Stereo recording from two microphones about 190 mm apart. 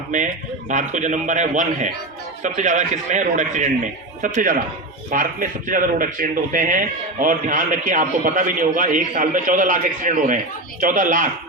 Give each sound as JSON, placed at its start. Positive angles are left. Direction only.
{"t": 0.7, "sound": "a man's voice", "side_deg": -40}